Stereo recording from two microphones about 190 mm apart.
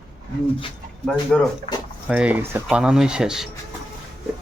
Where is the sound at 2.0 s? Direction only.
5° right (ahead or behind).